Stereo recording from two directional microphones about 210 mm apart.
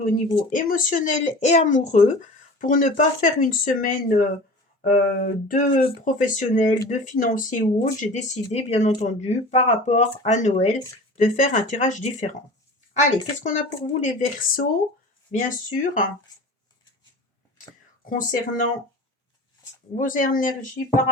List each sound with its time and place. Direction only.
0.5 s speech: 40° left (ahead or behind)
18.0 s speech: 40° left (ahead or behind)
20.0 s speech: 40° left (ahead or behind)